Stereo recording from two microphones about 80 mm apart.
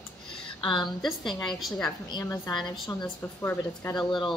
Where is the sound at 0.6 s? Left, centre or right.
Left.